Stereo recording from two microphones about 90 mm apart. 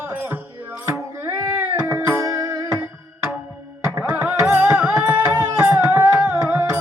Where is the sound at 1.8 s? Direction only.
30° right (ahead or behind).